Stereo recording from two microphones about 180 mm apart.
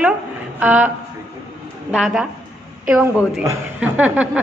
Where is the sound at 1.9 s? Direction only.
5° right (ahead or behind).